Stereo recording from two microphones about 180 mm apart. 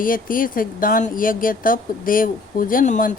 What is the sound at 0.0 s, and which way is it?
Speech, 50° left (ahead or behind).